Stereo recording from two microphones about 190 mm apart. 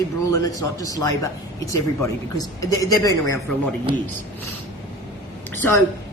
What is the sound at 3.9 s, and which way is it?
Speech, 25° right (ahead or behind).